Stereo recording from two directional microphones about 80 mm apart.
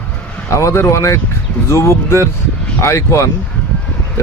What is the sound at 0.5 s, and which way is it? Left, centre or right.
A man's voice, left.